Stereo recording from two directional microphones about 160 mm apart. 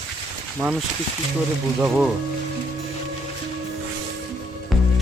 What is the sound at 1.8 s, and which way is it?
Speech, 10° right (ahead or behind).